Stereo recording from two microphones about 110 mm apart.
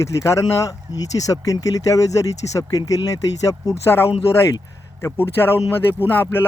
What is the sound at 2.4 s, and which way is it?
Speech, 35° left (ahead or behind).